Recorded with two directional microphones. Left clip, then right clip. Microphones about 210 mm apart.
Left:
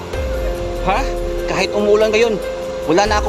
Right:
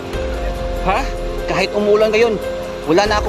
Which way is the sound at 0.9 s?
5° left (ahead or behind).